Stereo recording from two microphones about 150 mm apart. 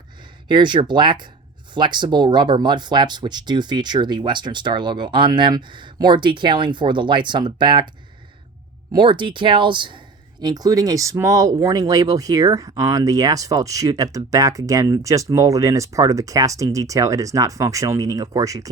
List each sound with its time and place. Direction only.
0.4 s speech: 30° right (ahead or behind)
8.9 s speech: 30° right (ahead or behind)